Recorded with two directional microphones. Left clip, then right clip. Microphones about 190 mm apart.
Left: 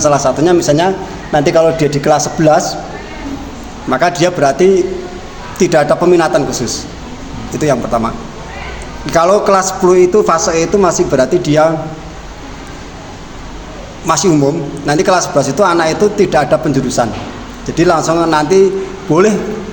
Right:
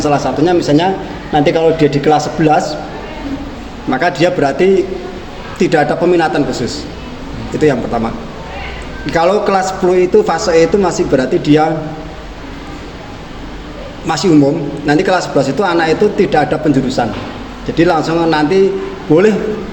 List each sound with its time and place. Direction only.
0.0 s a man's voice: 45° left (ahead or behind)
3.9 s a man's voice: 40° left (ahead or behind)
14.1 s a man's voice: 40° left (ahead or behind)